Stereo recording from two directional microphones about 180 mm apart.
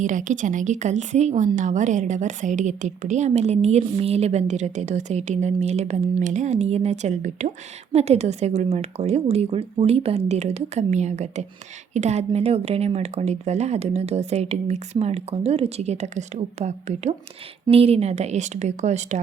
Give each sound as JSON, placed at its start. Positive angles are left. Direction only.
{"t": 0.0, "sound": "a woman's voice", "side_deg": -45}